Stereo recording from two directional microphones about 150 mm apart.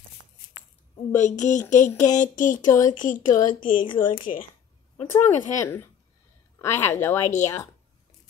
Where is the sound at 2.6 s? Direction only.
25° left (ahead or behind).